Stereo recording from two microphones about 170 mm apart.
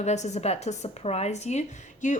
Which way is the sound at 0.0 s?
40° left (ahead or behind).